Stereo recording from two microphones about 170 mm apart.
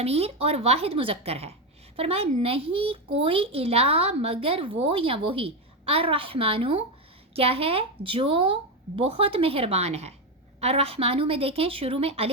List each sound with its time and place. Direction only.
0.0 s speech: 35° right (ahead or behind)